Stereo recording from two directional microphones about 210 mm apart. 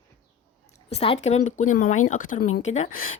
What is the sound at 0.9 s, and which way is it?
A woman's voice, 30° left (ahead or behind).